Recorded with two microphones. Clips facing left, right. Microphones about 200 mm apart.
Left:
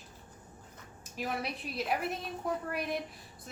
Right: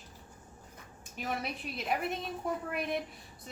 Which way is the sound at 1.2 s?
Centre (ahead or behind).